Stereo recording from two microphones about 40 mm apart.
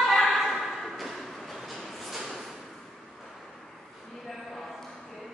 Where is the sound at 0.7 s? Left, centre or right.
Centre.